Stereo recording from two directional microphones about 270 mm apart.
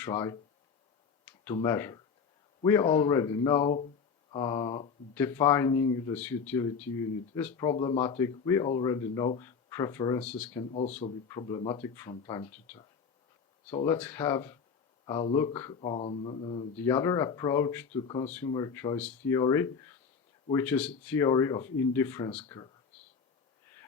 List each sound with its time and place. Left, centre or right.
0.0 s speech: centre
1.5 s speech: centre
10.7 s speech: left
12.5 s speech: centre
13.8 s speech: centre